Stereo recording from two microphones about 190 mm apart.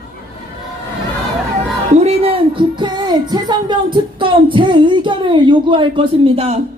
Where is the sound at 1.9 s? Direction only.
30° right (ahead or behind).